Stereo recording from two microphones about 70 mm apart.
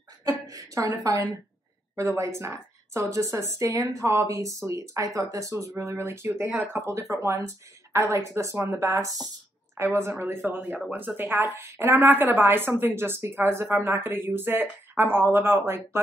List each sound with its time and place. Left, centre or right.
0.2 s a woman's voice: right
9.8 s a woman's voice: right